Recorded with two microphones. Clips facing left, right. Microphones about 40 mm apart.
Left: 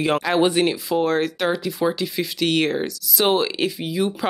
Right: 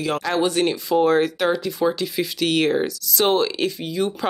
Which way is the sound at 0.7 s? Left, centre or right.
Centre.